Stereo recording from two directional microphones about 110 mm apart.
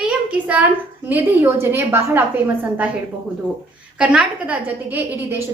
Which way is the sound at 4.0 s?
10° right (ahead or behind).